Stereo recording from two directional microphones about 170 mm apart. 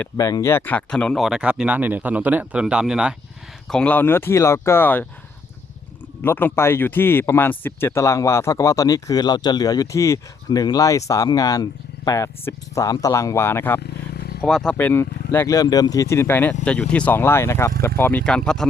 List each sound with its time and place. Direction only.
0.2 s speech: 20° left (ahead or behind); by 3.2 s 5° right (ahead or behind)
3.7 s speech: 5° left (ahead or behind)
6.2 s speech: 15° left (ahead or behind)
14.4 s speech: centre (ahead or behind)